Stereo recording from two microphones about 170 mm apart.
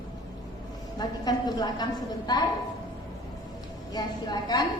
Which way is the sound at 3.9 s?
25° left (ahead or behind).